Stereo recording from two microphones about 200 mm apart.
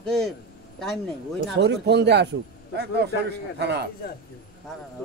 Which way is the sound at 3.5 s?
55° right (ahead or behind).